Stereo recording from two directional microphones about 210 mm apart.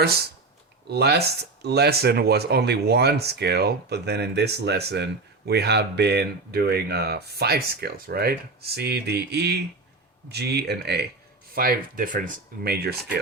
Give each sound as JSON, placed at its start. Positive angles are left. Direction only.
{"t": 0.0, "sound": "speech", "side_deg": -50}